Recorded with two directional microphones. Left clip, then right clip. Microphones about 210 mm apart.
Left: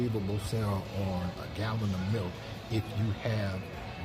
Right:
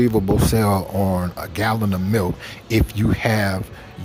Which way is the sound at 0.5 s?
45° right (ahead or behind).